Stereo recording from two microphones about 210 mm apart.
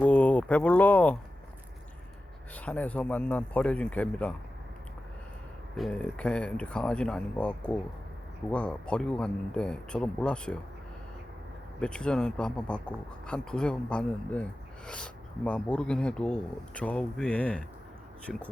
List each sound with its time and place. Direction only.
0.0 s a sound: 5° left (ahead or behind)
2.6 s speech: 5° left (ahead or behind)
5.7 s speech: 5° left (ahead or behind)
11.8 s speech: 5° left (ahead or behind)